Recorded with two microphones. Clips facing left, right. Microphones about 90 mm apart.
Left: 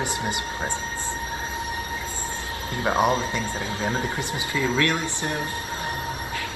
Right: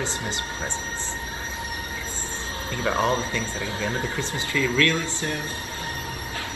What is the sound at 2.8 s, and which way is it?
Speech, 20° left (ahead or behind).